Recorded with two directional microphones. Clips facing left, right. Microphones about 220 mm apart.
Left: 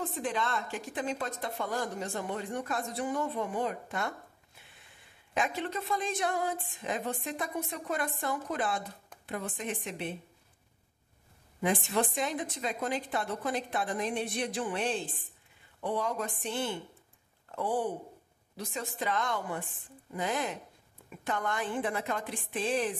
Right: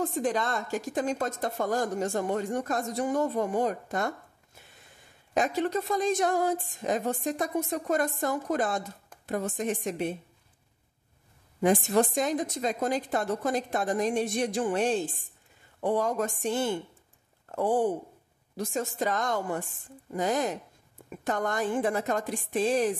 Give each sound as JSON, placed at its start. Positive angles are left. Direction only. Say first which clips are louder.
{"t": 0.0, "sound": "speech", "louder": "right 5 dB", "side_deg": -40}
{"t": 5.3, "sound": "speech", "louder": "right 6 dB", "side_deg": -40}
{"t": 11.6, "sound": "speech", "louder": "right 6 dB", "side_deg": -45}